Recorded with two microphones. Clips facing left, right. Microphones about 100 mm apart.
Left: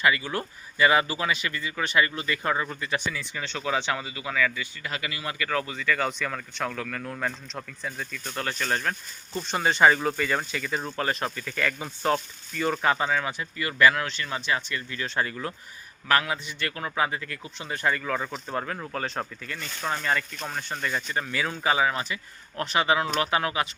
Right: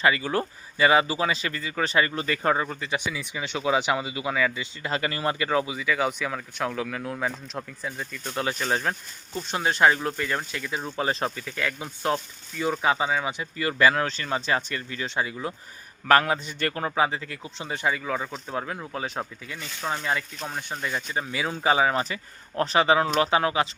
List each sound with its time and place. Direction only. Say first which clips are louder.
0.0 s speech: right 2 dB; 35° right (ahead or behind)
5.5 s speech: right 2 dB; 15° right (ahead or behind)
10.9 s speech: right 2 dB; 20° right (ahead or behind)
11.5 s speech: left 1 dB; 5° right (ahead or behind)
13.6 s speech: even; 30° right (ahead or behind)
16.0 s speech: right 5 dB; 40° right (ahead or behind)
17.8 s speech: even; 10° right (ahead or behind); by 23.6 s 25° right (ahead or behind)